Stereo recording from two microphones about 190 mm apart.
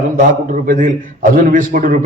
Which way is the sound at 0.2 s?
45° right (ahead or behind).